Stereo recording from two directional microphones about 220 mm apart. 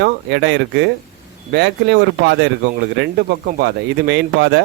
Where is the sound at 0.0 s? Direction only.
55° right (ahead or behind).